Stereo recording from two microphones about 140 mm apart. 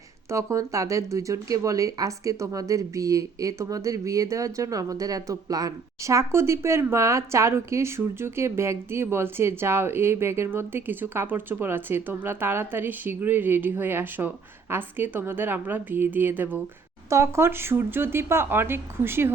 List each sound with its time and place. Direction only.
0.3 s speech: 20° right (ahead or behind)